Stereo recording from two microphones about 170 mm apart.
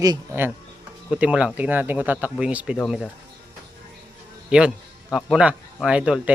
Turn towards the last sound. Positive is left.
turn(degrees=-5)  # may be behind; listen again after turning